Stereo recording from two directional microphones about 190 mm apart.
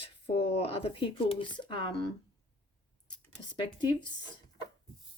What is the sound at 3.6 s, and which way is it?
Speech, 25° left (ahead or behind).